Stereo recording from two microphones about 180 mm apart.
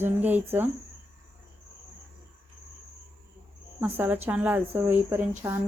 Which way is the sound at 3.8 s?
10° right (ahead or behind).